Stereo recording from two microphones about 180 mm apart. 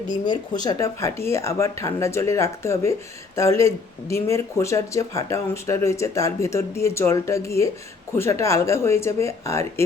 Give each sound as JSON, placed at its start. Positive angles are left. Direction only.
{"t": 0.3, "sound": "speech", "side_deg": 20}